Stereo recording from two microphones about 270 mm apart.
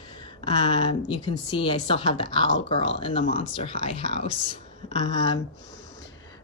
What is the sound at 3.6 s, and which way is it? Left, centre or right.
Speech, right.